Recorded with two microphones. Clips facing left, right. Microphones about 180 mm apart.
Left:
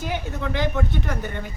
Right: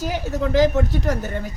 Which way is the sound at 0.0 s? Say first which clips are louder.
Right 5 dB; 40° right (ahead or behind).